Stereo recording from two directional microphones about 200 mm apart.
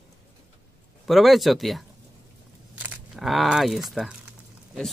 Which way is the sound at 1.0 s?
Centre (ahead or behind).